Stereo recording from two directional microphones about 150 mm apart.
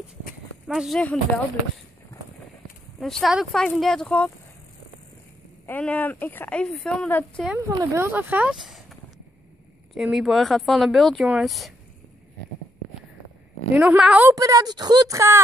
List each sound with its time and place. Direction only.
0.7 s speech: centre (ahead or behind)
3.0 s speech: centre (ahead or behind)
5.7 s speech: 10° left (ahead or behind)
7.5 s speech: 20° right (ahead or behind); by 8.9 s centre (ahead or behind)
9.9 s speech: centre (ahead or behind)
13.7 s speech: 5° right (ahead or behind)
14.3 s speech: 25° right (ahead or behind)